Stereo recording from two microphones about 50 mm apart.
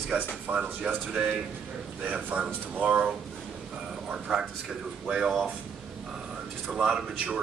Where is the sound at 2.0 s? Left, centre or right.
Right.